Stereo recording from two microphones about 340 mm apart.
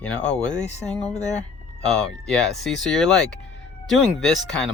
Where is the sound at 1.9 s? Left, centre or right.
Centre.